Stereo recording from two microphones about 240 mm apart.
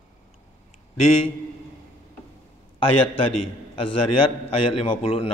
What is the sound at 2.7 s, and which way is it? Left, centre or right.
Speech, left.